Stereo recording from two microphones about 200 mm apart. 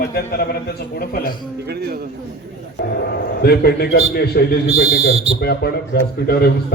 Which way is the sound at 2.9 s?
55° left (ahead or behind).